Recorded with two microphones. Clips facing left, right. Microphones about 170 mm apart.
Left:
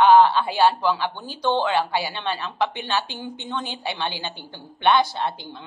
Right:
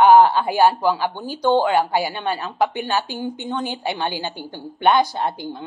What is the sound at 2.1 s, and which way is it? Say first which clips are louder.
Speech: right 3 dB; 40° right (ahead or behind).